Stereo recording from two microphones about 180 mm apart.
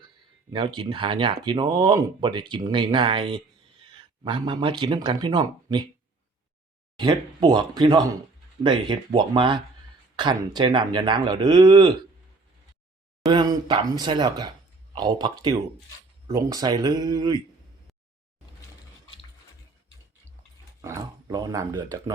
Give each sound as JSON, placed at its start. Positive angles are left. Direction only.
{"t": 0.5, "sound": "speech", "side_deg": -25}
{"t": 7.0, "sound": "speech", "side_deg": -25}
{"t": 13.2, "sound": "speech", "side_deg": -20}
{"t": 20.8, "sound": "speech", "side_deg": -15}